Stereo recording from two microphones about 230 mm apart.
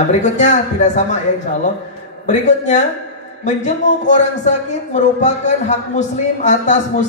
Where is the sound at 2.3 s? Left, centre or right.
Left.